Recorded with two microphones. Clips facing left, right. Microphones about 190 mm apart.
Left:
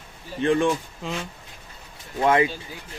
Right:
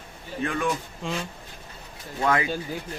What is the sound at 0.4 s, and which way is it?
Speech, 30° left (ahead or behind).